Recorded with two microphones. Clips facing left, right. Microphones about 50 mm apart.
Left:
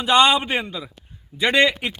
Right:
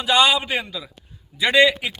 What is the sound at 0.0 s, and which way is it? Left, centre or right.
Speech, left.